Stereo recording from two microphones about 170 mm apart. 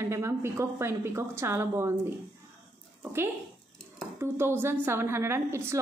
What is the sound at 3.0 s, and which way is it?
A woman's voice, 15° right (ahead or behind).